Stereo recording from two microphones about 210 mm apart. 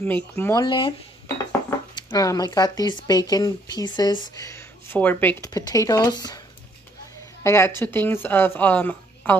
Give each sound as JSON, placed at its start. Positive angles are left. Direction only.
{"t": 0.0, "sound": "speech", "side_deg": 10}
{"t": 0.7, "sound": "speech", "side_deg": 25}
{"t": 2.0, "sound": "speech", "side_deg": 15}
{"t": 7.4, "sound": "speech", "side_deg": 15}